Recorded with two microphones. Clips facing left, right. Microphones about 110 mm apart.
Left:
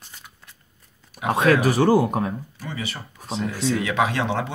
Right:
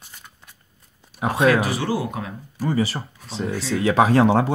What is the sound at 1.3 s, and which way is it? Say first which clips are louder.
Speech: left 1 dB; 45° left (ahead or behind).